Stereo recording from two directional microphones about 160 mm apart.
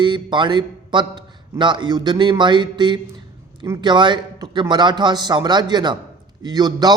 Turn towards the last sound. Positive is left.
turn(degrees=-25)  # may be behind; listen again after turning